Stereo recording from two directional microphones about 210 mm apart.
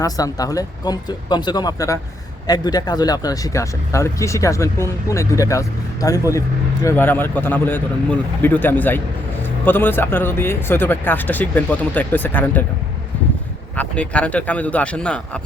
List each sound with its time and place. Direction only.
0.0 s speech: 15° left (ahead or behind)
13.7 s speech: 5° left (ahead or behind)